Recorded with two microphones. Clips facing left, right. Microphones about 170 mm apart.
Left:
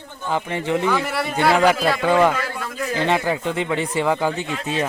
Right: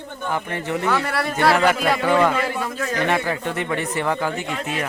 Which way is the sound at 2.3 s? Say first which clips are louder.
Right 4 dB; 20° right (ahead or behind).